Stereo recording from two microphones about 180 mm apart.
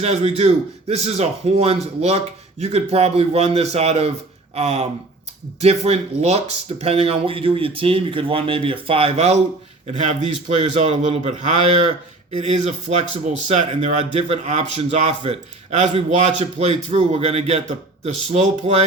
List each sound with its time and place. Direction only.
0.0 s a man's voice: 35° right (ahead or behind)